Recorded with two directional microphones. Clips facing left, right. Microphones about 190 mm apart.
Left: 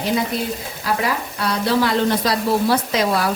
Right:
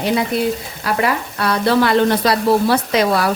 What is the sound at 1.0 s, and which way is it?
Speech, 60° right (ahead or behind).